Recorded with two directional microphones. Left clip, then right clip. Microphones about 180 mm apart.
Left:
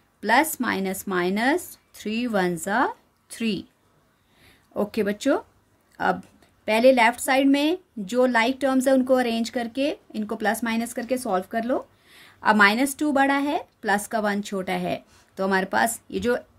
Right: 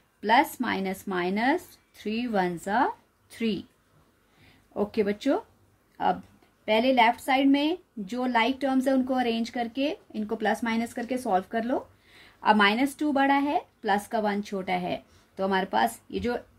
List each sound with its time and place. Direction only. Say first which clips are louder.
0.2 s speech: left 2 dB; 30° left (ahead or behind)
4.7 s speech: left 2 dB; 30° left (ahead or behind)
6.6 s speech: left 4 dB; 35° left (ahead or behind)